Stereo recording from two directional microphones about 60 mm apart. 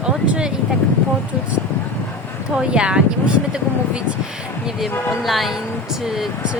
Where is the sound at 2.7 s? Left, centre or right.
Centre.